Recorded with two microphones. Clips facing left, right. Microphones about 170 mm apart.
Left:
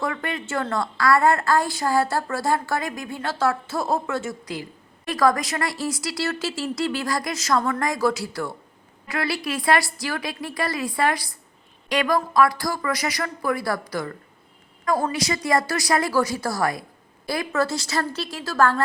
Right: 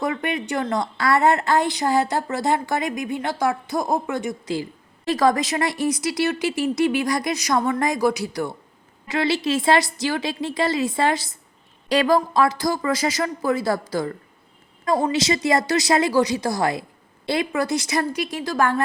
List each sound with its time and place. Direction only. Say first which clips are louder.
0.0 s a woman's voice: right 3 dB; 20° right (ahead or behind)